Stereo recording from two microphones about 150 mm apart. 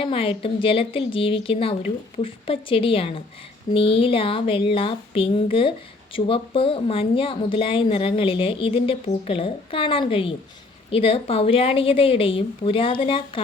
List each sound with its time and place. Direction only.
0.0 s speech: 35° left (ahead or behind)